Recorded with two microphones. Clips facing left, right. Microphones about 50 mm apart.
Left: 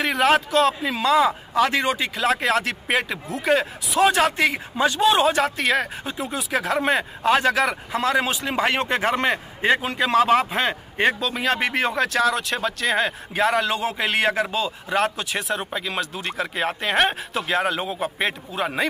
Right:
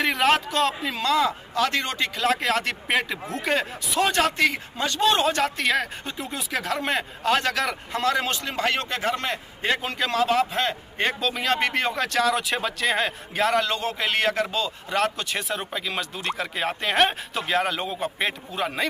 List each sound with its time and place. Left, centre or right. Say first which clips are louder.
0.0 s a man's voice: left 2 dB; centre; by 9.7 s left
9.7 s a man's voice: left 5 dB; centre
10.1 s a man's voice: left 4 dB; left
11.1 s speech: left 1 dB; centre